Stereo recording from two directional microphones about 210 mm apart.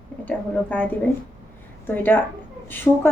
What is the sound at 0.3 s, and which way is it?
Speech, 10° left (ahead or behind).